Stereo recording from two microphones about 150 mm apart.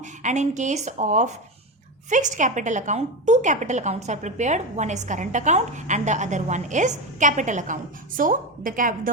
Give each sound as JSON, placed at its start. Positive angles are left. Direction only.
{"t": 0.0, "sound": "a woman's voice", "side_deg": -55}